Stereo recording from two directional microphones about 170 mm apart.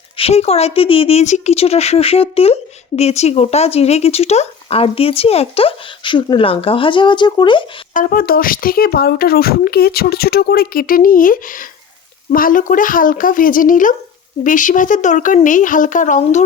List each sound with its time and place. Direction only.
0.2 s a woman's voice: 35° left (ahead or behind)
7.9 s a woman's voice: 55° left (ahead or behind)